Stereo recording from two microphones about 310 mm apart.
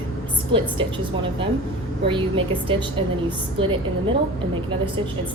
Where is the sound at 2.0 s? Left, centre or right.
Centre.